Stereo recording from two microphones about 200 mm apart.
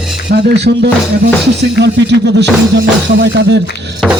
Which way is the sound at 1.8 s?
60° right (ahead or behind).